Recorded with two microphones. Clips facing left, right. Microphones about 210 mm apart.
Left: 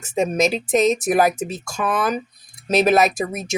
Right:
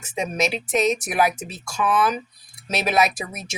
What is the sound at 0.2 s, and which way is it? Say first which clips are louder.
Speech: left 5 dB; 40° left (ahead or behind).